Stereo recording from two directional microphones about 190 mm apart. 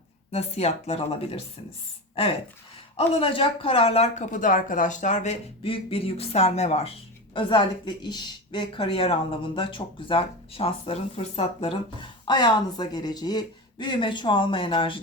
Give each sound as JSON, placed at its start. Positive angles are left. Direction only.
{"t": 0.3, "sound": "speech", "side_deg": 35}
{"t": 2.9, "sound": "speech", "side_deg": 30}